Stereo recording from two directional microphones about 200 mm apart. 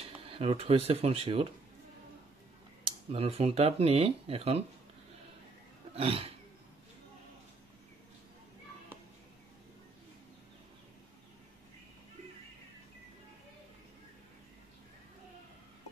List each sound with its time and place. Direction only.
0.0 s speech: 30° right (ahead or behind)
3.1 s speech: 30° right (ahead or behind)
5.9 s roaring cats: 30° right (ahead or behind)